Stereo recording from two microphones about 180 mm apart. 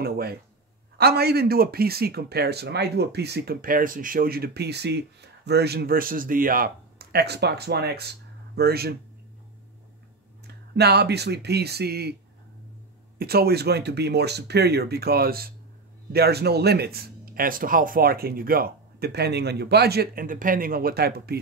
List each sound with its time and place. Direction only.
0.0 s speech: 60° right (ahead or behind)
10.4 s speech: 65° right (ahead or behind)
13.2 s speech: 60° right (ahead or behind)